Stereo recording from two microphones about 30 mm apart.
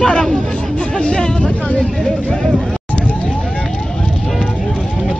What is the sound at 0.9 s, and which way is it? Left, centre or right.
Speech, left.